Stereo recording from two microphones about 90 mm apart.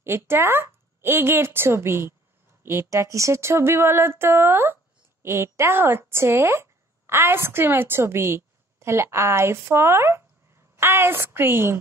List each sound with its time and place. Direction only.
0.0 s speech: 30° right (ahead or behind)